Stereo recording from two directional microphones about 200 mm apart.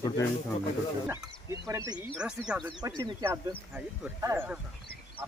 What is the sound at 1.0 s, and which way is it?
Speech, 10° right (ahead or behind).